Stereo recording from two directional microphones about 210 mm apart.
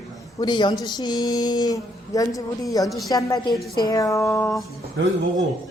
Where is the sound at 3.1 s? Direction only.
15° left (ahead or behind).